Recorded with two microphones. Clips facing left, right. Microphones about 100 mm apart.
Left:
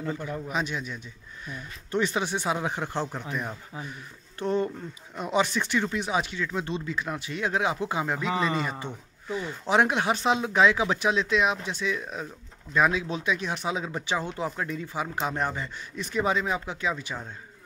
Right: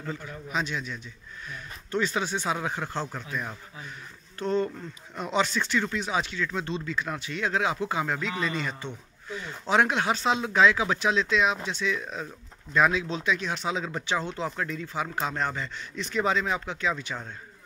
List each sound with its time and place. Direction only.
0.6 s speech: 10° left (ahead or behind)
4.4 s speech: 15° left (ahead or behind)
5.1 s speech: 5° left (ahead or behind)
5.4 s speech: 15° left (ahead or behind)
8.3 s a man's voice: 40° left (ahead or behind)
8.8 s speech: 10° left (ahead or behind)